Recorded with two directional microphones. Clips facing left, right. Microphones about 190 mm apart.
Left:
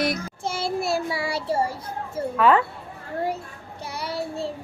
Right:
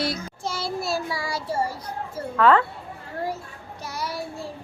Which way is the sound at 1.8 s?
25° left (ahead or behind).